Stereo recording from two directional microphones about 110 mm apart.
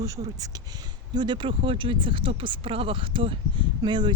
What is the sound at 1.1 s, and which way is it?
Speech, 45° right (ahead or behind).